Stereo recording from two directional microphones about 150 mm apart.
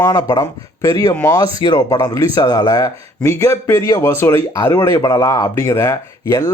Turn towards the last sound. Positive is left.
turn(degrees=20)  # may be behind; listen again after turning